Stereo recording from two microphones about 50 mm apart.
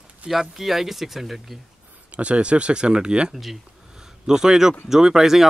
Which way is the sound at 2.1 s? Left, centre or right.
Right.